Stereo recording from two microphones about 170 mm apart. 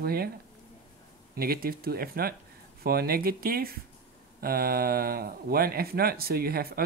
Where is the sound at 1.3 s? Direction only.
60° right (ahead or behind).